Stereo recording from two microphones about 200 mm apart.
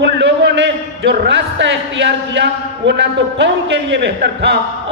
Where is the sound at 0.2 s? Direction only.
60° right (ahead or behind).